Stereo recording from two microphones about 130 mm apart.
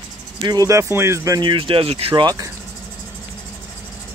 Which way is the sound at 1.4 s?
40° right (ahead or behind).